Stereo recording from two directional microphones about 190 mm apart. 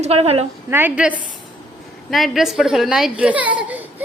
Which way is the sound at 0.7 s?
10° right (ahead or behind).